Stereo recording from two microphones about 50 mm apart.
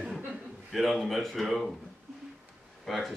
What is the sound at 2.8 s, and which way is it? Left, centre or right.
Speech, centre.